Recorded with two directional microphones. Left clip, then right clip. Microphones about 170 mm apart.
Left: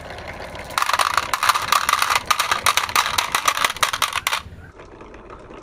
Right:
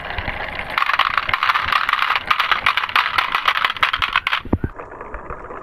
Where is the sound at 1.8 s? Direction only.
45° left (ahead or behind).